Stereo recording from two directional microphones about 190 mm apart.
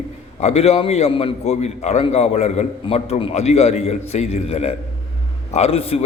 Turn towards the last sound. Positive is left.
turn(degrees=30)  # may be behind; listen again after turning